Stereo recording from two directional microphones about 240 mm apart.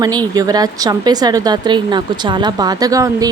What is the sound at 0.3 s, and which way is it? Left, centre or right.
Speech, centre.